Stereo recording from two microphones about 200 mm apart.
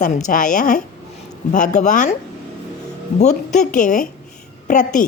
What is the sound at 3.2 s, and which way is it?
A woman's voice, 35° left (ahead or behind).